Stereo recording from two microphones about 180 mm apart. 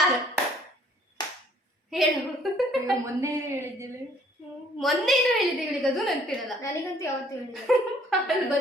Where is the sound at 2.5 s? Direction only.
Centre (ahead or behind).